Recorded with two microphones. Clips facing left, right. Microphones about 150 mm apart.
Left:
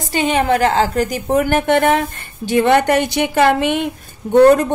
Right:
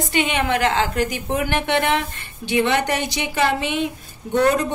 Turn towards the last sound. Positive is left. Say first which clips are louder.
# left 8 dB
turn(degrees=50)  # may be behind; listen again after turning